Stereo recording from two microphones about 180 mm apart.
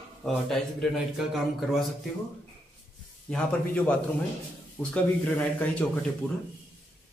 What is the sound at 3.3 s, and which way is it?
A man's voice, 5° left (ahead or behind).